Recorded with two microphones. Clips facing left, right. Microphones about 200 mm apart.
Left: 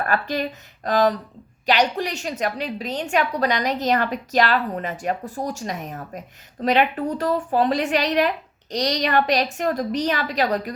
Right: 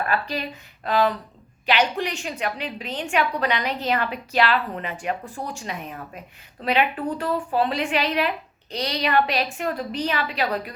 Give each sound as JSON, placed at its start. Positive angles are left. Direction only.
{"t": 0.0, "sound": "a woman's voice", "side_deg": 45}